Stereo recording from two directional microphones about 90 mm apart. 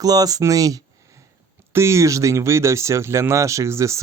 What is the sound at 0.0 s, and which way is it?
Speech, 45° right (ahead or behind).